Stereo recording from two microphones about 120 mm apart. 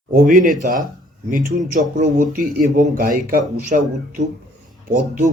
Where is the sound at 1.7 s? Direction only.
90° right.